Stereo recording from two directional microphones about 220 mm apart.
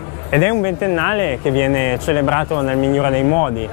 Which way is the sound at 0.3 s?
15° left (ahead or behind).